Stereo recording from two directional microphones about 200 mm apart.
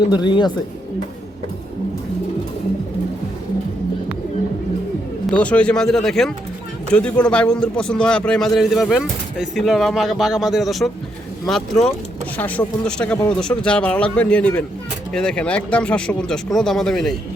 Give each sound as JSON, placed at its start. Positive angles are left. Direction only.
{"t": 0.2, "sound": "speech", "side_deg": 20}
{"t": 5.4, "sound": "a man's voice", "side_deg": 5}